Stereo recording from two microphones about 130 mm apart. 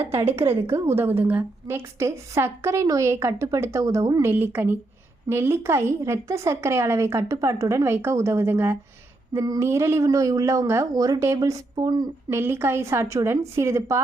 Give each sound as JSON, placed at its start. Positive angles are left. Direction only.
{"t": 0.1, "sound": "a woman's voice", "side_deg": -20}
{"t": 12.3, "sound": "a woman's voice", "side_deg": -20}